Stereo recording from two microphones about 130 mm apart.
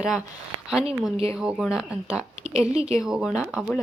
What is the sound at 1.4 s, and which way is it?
Speech, 5° right (ahead or behind).